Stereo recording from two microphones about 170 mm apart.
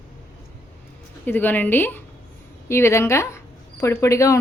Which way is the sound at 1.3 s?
10° left (ahead or behind).